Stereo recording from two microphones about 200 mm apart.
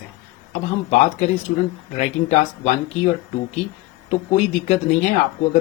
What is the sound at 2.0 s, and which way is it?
Speech, 35° left (ahead or behind).